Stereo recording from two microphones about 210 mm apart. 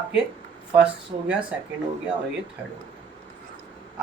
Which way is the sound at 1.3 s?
5° right (ahead or behind).